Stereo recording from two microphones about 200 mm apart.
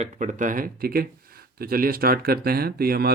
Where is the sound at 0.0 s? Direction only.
40° right (ahead or behind).